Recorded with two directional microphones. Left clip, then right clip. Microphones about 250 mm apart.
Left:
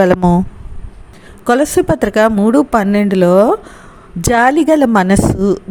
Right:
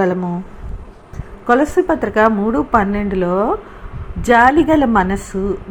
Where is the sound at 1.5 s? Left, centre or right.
Left.